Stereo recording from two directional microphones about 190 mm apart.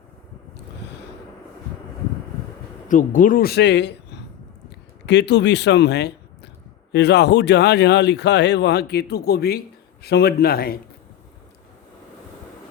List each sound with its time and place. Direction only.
0.8 s a sound: 60° left (ahead or behind)
2.9 s speech: 45° left (ahead or behind); by 3.9 s 65° left (ahead or behind)
5.0 s speech: 65° left (ahead or behind)